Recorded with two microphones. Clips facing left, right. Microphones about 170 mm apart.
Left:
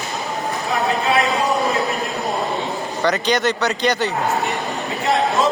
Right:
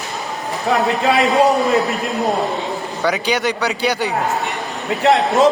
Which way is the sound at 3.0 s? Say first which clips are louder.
Even; 10° right (ahead or behind).